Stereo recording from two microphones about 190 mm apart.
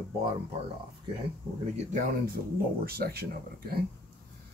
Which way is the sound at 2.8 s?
55° right (ahead or behind).